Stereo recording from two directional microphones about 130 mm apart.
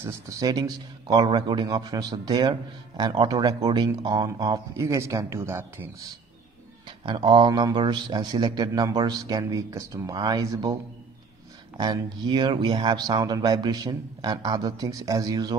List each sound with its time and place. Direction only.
0.0 s speech: 25° right (ahead or behind)
7.2 s speech: 35° right (ahead or behind)
11.8 s speech: 35° right (ahead or behind)